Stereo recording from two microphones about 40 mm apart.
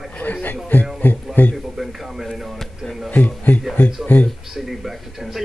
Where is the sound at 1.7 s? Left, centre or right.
Centre.